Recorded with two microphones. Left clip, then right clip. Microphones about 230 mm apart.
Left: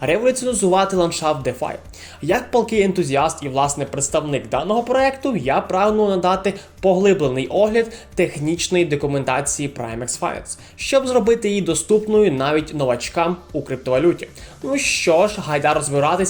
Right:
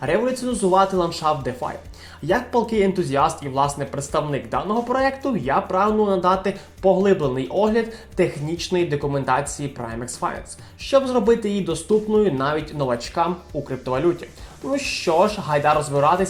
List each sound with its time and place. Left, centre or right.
0.0 s speech: left